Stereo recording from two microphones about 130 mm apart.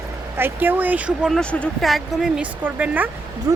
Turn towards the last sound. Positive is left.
turn(degrees=-25)  # may be behind; listen again after turning